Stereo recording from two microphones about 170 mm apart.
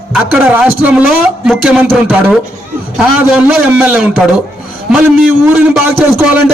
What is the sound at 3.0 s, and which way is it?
A man's voice, 5° right (ahead or behind).